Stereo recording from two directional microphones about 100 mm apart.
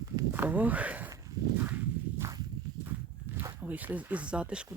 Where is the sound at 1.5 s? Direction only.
20° right (ahead or behind).